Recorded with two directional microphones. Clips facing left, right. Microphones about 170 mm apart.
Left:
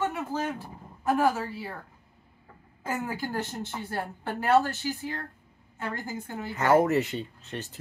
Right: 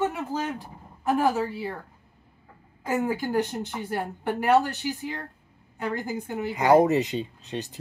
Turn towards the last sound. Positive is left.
turn(degrees=-15)  # may be behind; listen again after turning